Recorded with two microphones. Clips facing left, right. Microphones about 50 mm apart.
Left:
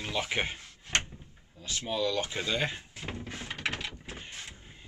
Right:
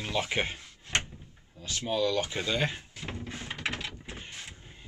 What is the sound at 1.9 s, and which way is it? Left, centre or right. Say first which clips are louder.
Speech: right 2 dB; centre.